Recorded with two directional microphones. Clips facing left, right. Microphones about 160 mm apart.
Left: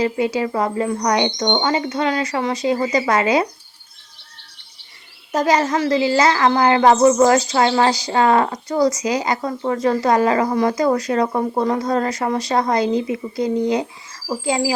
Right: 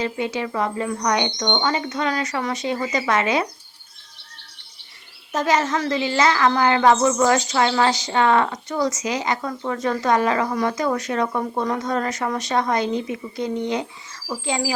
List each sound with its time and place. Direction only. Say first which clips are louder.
0.0 s speech: left 5 dB; 35° left (ahead or behind)
5.3 s speech: left 3 dB; 35° left (ahead or behind)